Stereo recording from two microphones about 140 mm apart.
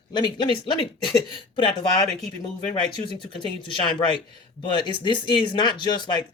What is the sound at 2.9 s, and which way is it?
Speech, 35° left (ahead or behind).